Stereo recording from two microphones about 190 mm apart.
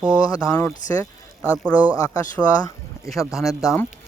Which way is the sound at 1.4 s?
5° left (ahead or behind).